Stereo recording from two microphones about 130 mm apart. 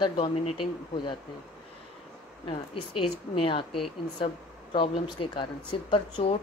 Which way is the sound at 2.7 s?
45° left (ahead or behind).